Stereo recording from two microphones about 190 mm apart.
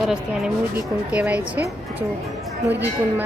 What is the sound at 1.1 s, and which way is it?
Speech, 10° right (ahead or behind).